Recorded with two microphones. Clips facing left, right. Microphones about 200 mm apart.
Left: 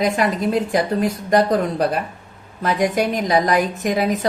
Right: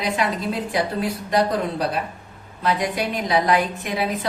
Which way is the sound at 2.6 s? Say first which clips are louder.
Left 4 dB; 45° left (ahead or behind).